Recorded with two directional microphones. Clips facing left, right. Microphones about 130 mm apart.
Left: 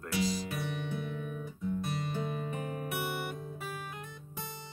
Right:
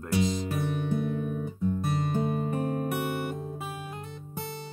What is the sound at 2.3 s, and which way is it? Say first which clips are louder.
Music: right 8 dB; 40° right (ahead or behind).